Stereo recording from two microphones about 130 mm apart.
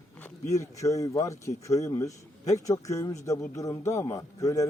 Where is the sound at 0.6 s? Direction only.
25° left (ahead or behind).